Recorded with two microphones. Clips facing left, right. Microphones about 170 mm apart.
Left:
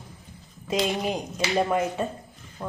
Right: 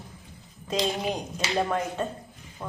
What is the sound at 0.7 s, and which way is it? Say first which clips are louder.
A woman's voice: left 2 dB; 10° left (ahead or behind).